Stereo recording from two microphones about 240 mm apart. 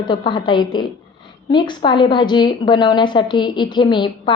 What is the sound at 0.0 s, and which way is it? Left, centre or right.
A woman's voice, centre.